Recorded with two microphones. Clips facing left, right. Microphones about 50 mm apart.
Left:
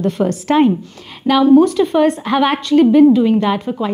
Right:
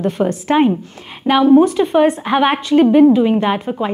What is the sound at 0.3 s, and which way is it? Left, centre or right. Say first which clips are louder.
Speech: left 1 dB; centre.